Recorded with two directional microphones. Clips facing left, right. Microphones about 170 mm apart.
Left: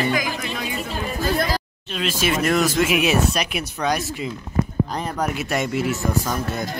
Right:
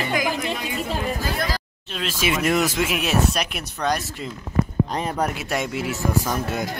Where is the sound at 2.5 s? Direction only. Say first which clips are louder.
Left 3 dB; 5° right (ahead or behind).